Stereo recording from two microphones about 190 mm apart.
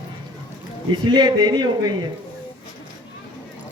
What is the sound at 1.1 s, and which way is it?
Speech, 20° right (ahead or behind).